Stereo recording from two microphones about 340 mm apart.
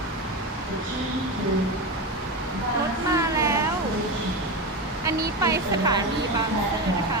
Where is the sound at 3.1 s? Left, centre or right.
Centre.